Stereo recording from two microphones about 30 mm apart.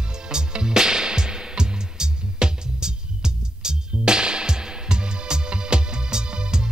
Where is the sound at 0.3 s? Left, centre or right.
Right.